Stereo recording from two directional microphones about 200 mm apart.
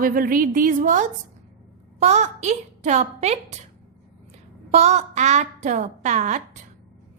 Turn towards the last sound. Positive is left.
turn(degrees=-40)  # may be behind; listen again after turning